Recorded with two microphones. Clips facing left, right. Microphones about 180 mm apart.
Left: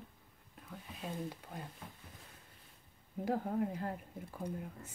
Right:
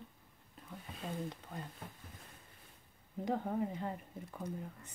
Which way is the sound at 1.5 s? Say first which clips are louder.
Right 1 dB; 10° left (ahead or behind).